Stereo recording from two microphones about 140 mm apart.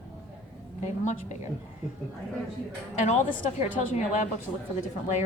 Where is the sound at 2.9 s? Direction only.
55° left (ahead or behind).